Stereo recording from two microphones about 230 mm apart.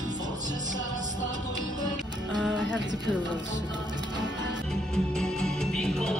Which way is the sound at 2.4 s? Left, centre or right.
Centre.